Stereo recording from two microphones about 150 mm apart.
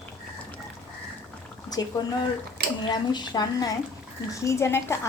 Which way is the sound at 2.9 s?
30° left (ahead or behind).